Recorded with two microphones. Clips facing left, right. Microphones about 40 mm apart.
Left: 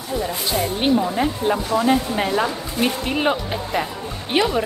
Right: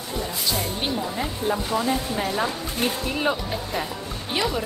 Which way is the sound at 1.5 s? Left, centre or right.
Left.